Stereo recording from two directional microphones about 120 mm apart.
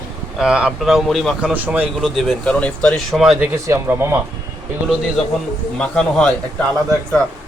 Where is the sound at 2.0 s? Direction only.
5° left (ahead or behind).